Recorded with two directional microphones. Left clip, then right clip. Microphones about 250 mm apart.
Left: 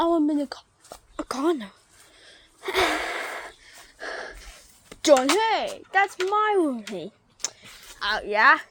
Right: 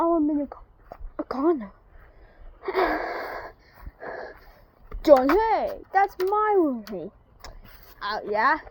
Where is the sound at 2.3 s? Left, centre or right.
Centre.